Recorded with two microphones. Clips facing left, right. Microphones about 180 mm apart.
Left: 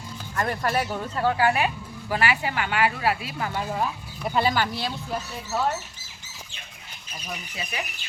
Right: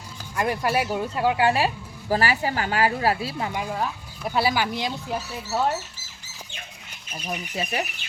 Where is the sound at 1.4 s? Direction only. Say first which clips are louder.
Right 1 dB; 30° right (ahead or behind).